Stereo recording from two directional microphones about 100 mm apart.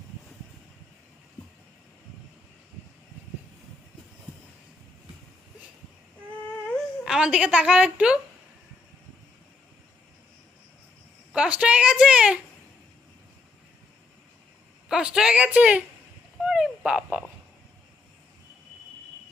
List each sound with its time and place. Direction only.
7.0 s a woman's voice: 5° right (ahead or behind)
11.3 s a woman's voice: 10° right (ahead or behind)
14.8 s a woman's voice: 5° right (ahead or behind)
16.4 s a sound: 10° right (ahead or behind)